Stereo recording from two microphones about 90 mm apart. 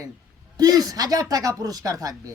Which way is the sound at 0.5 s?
45° right (ahead or behind).